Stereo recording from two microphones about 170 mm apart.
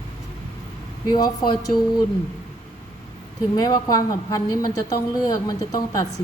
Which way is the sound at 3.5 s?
20° left (ahead or behind).